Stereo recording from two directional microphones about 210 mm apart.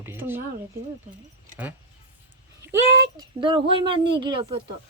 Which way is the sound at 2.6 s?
15° right (ahead or behind).